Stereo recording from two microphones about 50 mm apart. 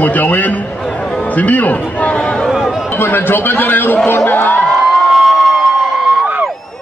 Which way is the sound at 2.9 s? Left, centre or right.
Left.